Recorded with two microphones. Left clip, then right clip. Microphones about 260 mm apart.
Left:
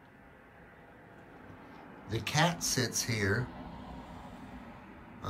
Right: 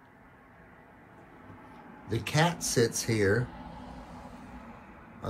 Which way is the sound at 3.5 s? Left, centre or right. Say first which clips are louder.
Right 1 dB; centre.